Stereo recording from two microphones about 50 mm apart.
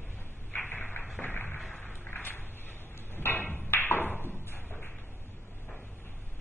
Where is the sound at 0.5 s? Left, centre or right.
Left.